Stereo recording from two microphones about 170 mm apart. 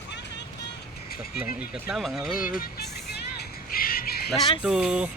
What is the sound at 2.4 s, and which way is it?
Speech, 55° left (ahead or behind).